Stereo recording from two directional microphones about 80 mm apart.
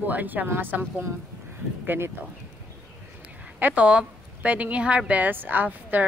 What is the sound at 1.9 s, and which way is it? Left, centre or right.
Speech, right.